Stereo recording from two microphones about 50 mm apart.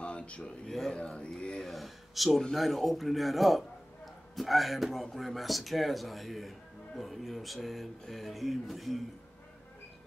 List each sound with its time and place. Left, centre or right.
0.0 s a sound: left
0.7 s speech: centre
0.9 s speech: left
1.6 s a man's voice: centre